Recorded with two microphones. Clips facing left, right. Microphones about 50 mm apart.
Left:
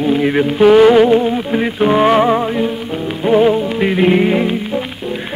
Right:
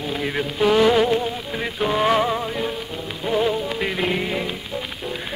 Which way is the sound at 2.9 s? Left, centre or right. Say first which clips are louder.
Left 13 dB; left.